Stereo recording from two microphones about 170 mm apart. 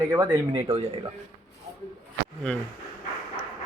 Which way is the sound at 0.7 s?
35° right (ahead or behind).